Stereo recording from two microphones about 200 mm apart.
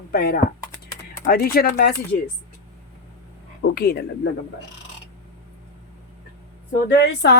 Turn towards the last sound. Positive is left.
turn(degrees=60)  # may be behind; listen again after turning